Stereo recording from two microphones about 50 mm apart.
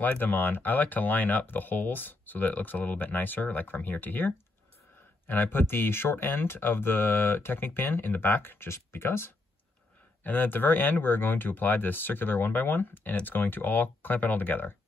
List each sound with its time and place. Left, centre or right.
0.0 s speech: left
8.6 s speech: left
10.2 s speech: left